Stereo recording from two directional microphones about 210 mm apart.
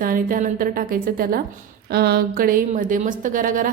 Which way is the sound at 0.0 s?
40° right (ahead or behind).